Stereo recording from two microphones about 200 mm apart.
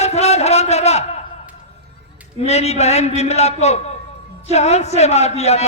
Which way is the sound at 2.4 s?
30° left (ahead or behind).